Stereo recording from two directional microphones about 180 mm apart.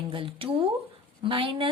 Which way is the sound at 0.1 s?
30° right (ahead or behind).